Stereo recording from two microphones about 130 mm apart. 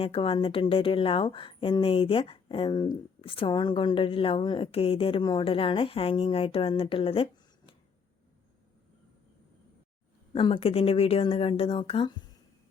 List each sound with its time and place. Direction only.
0.0 s a woman's voice: 45° left (ahead or behind)
10.3 s a woman's voice: 40° left (ahead or behind)